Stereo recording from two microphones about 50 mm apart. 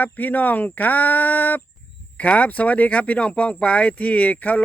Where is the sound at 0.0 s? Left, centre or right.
Left.